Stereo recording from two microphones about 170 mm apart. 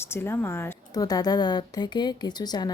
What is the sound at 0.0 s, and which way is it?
Speech, 15° left (ahead or behind).